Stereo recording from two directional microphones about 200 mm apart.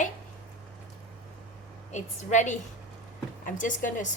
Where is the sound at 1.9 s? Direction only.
35° left (ahead or behind).